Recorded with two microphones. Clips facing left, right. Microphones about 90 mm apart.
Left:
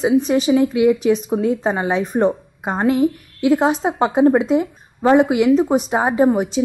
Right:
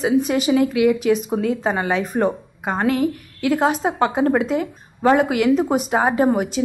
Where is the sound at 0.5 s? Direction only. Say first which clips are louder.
Left 2 dB; 5° left (ahead or behind).